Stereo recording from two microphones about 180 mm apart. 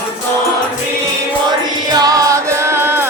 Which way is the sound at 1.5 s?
25° right (ahead or behind).